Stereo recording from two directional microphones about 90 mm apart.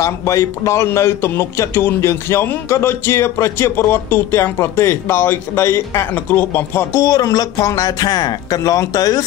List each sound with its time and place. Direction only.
0.0 s a man's voice: 35° left (ahead or behind)